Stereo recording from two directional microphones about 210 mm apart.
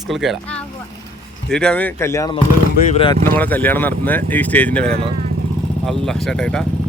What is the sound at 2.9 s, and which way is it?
Speech, 25° left (ahead or behind).